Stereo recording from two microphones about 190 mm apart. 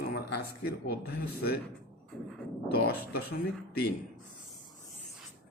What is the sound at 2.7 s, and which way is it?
Speech, 60° left (ahead or behind).